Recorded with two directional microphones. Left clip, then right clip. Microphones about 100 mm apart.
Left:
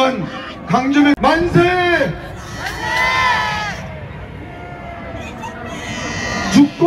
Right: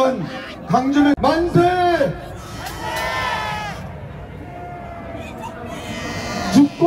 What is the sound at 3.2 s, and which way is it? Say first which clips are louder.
Crowd: left 7 dB; 15° left (ahead or behind).